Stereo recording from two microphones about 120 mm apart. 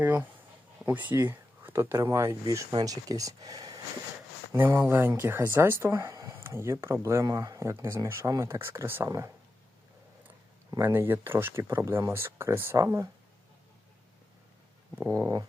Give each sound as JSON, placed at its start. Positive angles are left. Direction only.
{"t": 0.0, "sound": "speech", "side_deg": -15}
{"t": 4.5, "sound": "speech", "side_deg": -15}
{"t": 10.7, "sound": "speech", "side_deg": -20}
{"t": 14.9, "sound": "speech", "side_deg": -25}